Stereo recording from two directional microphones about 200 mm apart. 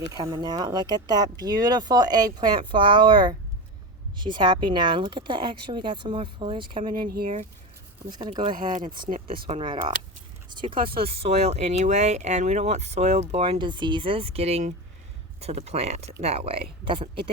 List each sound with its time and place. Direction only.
0.1 s speech: 20° right (ahead or behind)
7.1 s speech: 50° right (ahead or behind)
8.1 s speech: 20° right (ahead or behind)